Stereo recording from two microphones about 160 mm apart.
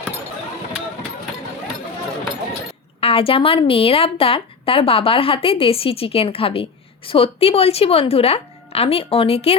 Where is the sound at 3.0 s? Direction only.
35° left (ahead or behind).